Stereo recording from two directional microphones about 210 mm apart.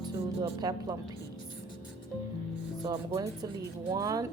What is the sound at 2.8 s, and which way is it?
Speech, 15° right (ahead or behind).